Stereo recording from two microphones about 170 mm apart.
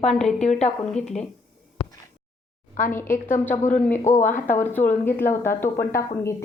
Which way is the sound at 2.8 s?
50° left (ahead or behind).